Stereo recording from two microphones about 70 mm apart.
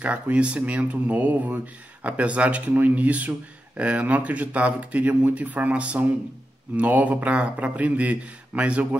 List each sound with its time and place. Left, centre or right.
0.0 s speech: centre